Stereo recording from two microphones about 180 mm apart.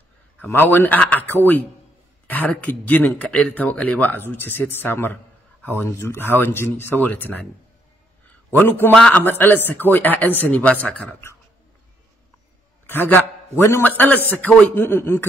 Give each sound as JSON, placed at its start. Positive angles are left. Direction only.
{"t": 0.4, "sound": "speech", "side_deg": 10}
{"t": 8.5, "sound": "speech", "side_deg": 10}
{"t": 12.8, "sound": "speech", "side_deg": 10}